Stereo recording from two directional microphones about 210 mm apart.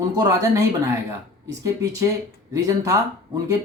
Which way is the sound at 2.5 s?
15° right (ahead or behind).